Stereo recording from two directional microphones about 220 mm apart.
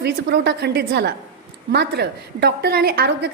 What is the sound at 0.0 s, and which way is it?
A woman's voice, 50° right (ahead or behind).